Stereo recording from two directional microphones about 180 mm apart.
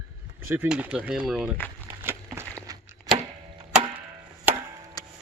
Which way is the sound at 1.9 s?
10° right (ahead or behind).